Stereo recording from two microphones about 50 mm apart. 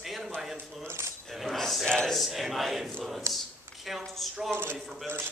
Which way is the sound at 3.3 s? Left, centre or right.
Right.